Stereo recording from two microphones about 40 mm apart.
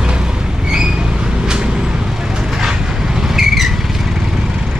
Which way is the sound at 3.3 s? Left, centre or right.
Centre.